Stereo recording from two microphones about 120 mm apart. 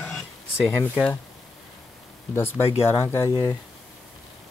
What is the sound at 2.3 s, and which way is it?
Speech, 20° left (ahead or behind).